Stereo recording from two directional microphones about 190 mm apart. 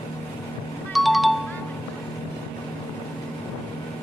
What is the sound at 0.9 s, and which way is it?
Music, centre (ahead or behind).